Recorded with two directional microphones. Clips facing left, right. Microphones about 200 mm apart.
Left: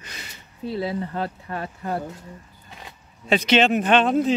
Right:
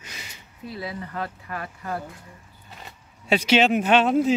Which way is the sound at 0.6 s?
30° left (ahead or behind).